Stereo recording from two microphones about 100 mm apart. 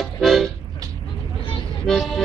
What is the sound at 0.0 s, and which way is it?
Music, 5° left (ahead or behind).